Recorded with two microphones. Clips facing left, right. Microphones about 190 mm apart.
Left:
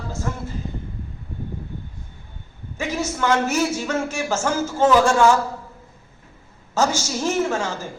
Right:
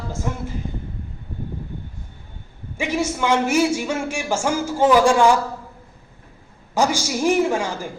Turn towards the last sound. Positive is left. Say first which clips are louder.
# right 2 dB
turn(degrees=-15)  # may be behind; listen again after turning